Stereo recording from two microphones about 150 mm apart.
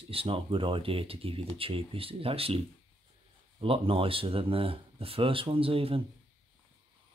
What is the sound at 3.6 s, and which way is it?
Speech, 35° right (ahead or behind).